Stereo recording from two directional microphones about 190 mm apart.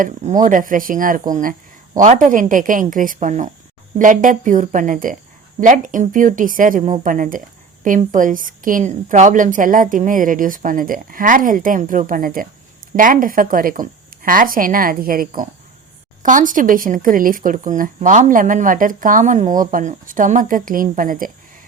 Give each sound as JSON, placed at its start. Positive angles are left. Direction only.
{"t": 0.0, "sound": "speech", "side_deg": -45}